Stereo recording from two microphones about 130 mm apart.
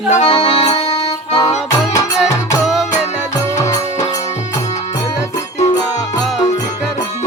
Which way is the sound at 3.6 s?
25° left (ahead or behind).